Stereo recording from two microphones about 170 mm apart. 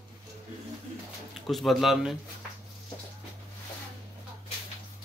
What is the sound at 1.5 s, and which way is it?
Speech, centre (ahead or behind).